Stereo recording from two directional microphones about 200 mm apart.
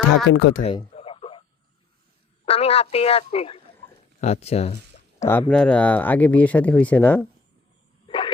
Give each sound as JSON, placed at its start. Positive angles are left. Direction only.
{"t": 0.3, "sound": "speech", "side_deg": 55}
{"t": 0.6, "sound": "radio", "side_deg": 25}
{"t": 2.5, "sound": "speech", "side_deg": 30}
{"t": 5.2, "sound": "speech", "side_deg": 10}
{"t": 8.0, "sound": "a sound", "side_deg": 25}